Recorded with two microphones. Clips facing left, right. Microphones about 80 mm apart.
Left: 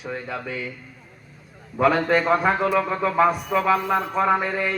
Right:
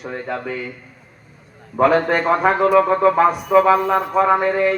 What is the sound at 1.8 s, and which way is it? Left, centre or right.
A man's voice, right.